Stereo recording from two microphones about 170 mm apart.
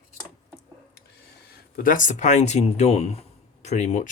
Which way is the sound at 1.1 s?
65° left (ahead or behind).